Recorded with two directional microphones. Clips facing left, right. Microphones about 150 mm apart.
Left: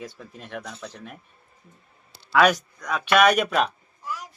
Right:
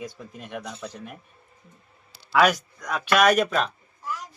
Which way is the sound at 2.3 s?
5° right (ahead or behind).